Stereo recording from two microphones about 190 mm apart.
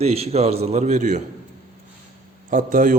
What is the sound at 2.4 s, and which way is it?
Speech, 45° right (ahead or behind).